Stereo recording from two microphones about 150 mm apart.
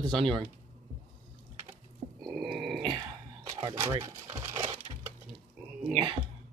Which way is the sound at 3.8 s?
25° right (ahead or behind).